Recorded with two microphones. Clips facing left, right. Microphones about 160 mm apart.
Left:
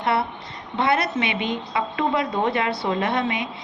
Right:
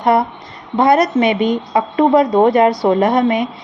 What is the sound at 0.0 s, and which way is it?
A woman's voice, 40° right (ahead or behind).